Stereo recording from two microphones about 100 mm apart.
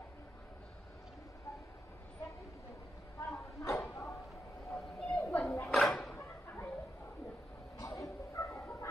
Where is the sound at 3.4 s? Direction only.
30° left (ahead or behind).